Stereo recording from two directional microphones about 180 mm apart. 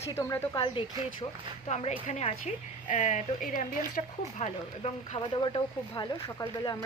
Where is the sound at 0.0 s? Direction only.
15° left (ahead or behind).